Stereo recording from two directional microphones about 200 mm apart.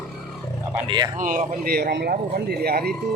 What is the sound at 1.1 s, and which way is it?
Speech, 40° right (ahead or behind).